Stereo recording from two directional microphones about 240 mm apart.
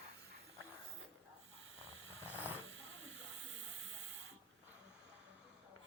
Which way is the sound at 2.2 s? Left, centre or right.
Centre.